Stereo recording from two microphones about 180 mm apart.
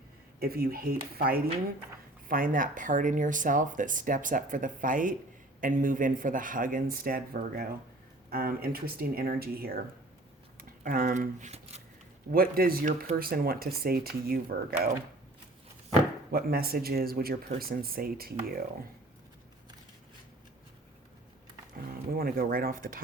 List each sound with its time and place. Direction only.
0.3 s speech: 55° right (ahead or behind); by 11.8 s 40° right (ahead or behind)
12.3 s speech: 55° right (ahead or behind)
16.3 s speech: 55° right (ahead or behind)
22.1 s speech: 55° right (ahead or behind)